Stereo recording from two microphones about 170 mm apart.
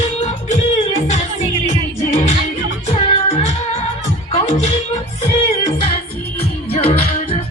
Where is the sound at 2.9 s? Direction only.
35° left (ahead or behind).